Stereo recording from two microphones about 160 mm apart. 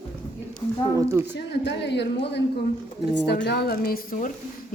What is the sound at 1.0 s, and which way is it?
Speech, 15° right (ahead or behind).